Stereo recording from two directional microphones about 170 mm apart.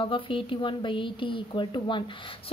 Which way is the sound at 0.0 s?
30° left (ahead or behind).